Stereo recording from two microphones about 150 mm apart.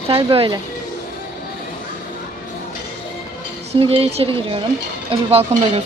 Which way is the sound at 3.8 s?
40° right (ahead or behind).